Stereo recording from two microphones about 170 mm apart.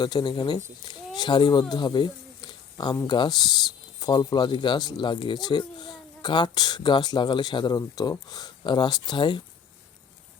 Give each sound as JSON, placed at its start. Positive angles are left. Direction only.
{"t": 0.0, "sound": "speech", "side_deg": 25}